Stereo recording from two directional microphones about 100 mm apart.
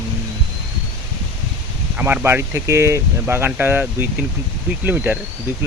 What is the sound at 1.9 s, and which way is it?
Speech, 20° right (ahead or behind).